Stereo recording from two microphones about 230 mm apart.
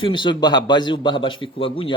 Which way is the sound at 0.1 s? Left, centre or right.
Left.